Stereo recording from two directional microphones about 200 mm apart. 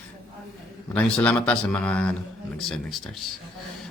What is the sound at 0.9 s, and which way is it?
Speech, 5° left (ahead or behind).